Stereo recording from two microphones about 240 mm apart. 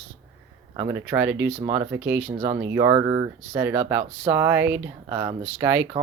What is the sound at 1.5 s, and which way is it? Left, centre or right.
Speech, right.